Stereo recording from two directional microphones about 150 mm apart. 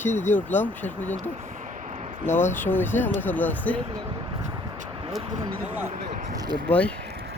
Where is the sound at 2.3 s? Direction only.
15° left (ahead or behind).